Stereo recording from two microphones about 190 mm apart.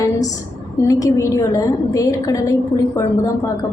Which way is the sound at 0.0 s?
20° left (ahead or behind).